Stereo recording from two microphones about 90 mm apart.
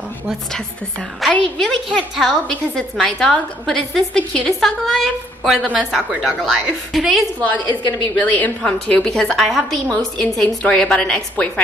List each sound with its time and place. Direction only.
1.3 s a woman's voice: 5° left (ahead or behind)
7.7 s a woman's voice: 15° left (ahead or behind); by 9.8 s centre (ahead or behind)
9.8 s a woman's voice: 15° left (ahead or behind)